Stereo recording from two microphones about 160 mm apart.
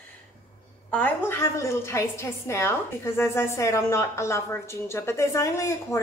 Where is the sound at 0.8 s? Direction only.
10° left (ahead or behind).